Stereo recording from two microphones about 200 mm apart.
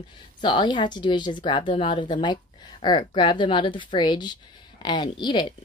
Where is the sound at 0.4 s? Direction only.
25° left (ahead or behind).